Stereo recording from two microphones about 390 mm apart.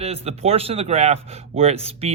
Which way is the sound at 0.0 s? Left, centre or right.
Centre.